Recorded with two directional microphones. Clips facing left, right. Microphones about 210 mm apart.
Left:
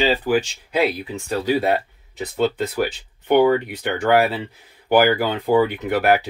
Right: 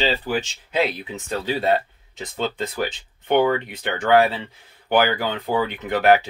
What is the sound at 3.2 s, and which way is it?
Speech, 10° left (ahead or behind).